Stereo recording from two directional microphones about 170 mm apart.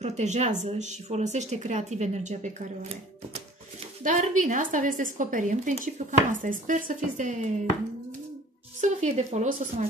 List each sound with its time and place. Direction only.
0.0 s speech: 40° right (ahead or behind)
8.8 s speech: 40° right (ahead or behind)